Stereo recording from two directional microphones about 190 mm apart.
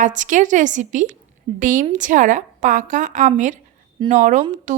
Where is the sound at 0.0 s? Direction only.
40° right (ahead or behind).